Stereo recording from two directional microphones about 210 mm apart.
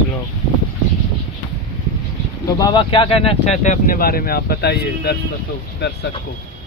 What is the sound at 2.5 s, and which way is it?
Speech, 20° left (ahead or behind).